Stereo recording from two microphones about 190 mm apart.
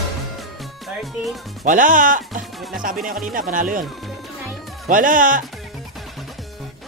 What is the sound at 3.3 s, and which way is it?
Speech, 45° right (ahead or behind).